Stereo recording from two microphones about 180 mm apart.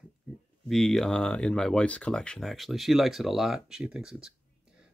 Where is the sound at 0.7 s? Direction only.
Centre (ahead or behind).